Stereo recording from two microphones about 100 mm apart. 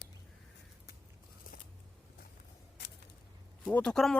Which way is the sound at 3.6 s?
10° left (ahead or behind).